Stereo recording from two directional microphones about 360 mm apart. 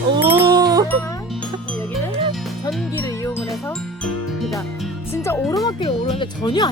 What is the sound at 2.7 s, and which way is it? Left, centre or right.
Music, centre.